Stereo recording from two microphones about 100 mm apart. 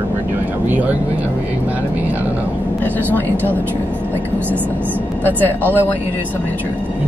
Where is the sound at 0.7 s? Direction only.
15° right (ahead or behind).